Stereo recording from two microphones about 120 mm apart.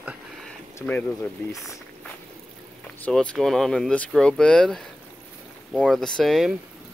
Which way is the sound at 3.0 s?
5° left (ahead or behind).